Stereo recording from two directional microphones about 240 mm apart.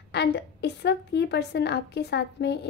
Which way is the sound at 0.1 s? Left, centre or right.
Left.